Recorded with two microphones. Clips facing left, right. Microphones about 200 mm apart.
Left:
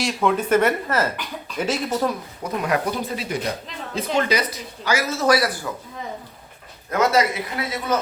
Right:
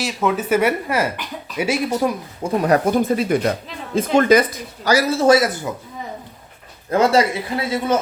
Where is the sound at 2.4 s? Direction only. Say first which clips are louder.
Right 7 dB; 35° right (ahead or behind).